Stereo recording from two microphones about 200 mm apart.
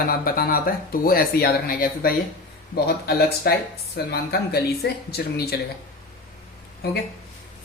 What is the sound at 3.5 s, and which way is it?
Speech, 55° left (ahead or behind).